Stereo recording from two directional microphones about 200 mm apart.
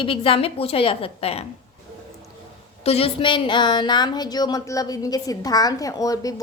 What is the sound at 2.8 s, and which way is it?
A woman's voice, 30° left (ahead or behind).